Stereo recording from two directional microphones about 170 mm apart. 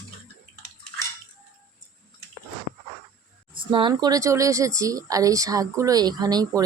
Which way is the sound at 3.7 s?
25° right (ahead or behind).